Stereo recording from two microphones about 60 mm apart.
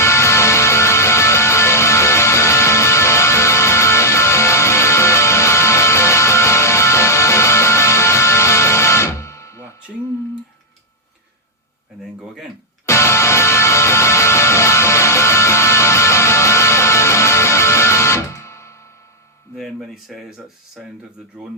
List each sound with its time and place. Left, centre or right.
0.0 s music: left
12.8 s music: left
19.5 s a sound: centre